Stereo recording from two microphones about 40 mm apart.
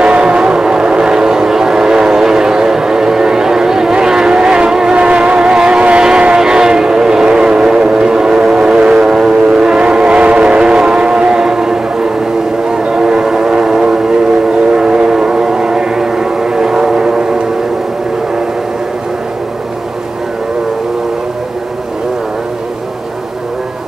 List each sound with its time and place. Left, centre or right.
0.0 s vehicle: right
9.3 s train: right